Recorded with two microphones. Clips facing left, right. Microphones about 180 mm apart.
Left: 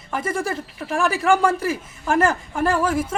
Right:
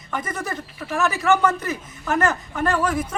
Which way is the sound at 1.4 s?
10° left (ahead or behind).